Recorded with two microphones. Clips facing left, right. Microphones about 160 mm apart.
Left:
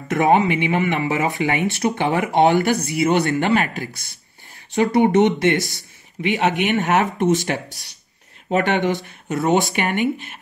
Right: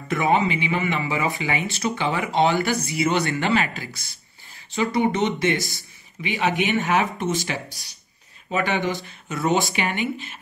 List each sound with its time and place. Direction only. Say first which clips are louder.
0.1 s speech: left 4 dB; 65° left (ahead or behind)
3.0 s speech: left 4 dB; 50° left (ahead or behind)
4.7 s speech: left 6 dB; 65° left (ahead or behind)